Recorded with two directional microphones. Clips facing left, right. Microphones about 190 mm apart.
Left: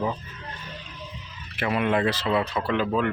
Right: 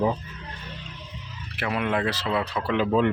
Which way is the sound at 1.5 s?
Centre (ahead or behind).